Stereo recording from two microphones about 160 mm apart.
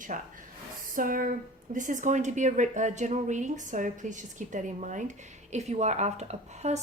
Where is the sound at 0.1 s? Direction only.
55° right (ahead or behind).